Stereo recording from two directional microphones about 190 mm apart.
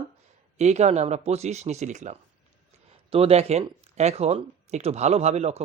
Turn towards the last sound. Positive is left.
turn(degrees=-35)  # may be behind; listen again after turning